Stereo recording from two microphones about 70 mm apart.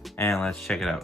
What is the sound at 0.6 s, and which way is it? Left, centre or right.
Speech, centre.